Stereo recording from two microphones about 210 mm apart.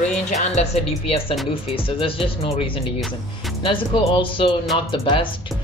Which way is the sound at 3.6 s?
25° left (ahead or behind).